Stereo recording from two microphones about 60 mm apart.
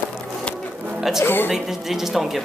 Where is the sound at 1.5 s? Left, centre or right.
Centre.